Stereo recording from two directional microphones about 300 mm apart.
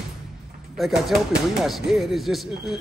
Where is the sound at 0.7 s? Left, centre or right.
Centre.